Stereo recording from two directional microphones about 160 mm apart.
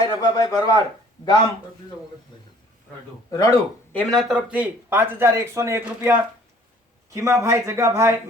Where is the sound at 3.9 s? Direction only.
Centre (ahead or behind).